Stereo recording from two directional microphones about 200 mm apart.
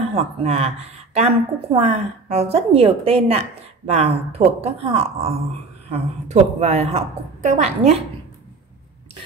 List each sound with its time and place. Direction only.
0.1 s a woman's voice: 30° right (ahead or behind)